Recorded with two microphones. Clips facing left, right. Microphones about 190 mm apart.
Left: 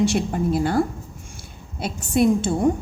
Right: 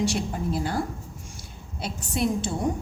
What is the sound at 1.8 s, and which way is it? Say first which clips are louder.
Speech: left 8 dB; 50° left (ahead or behind).